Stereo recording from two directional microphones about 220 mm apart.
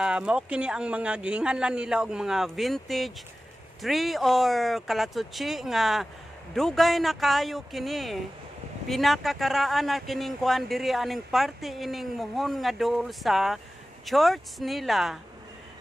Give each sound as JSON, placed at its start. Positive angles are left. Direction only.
{"t": 0.0, "sound": "speech", "side_deg": -5}